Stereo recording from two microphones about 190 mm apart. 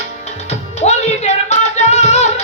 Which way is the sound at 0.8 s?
35° left (ahead or behind).